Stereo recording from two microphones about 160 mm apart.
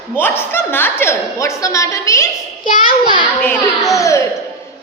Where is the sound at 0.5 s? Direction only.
15° left (ahead or behind).